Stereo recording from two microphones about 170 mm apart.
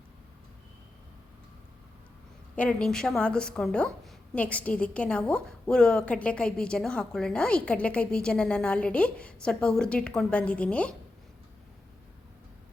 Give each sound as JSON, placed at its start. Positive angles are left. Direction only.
{"t": 2.6, "sound": "a woman's voice", "side_deg": 5}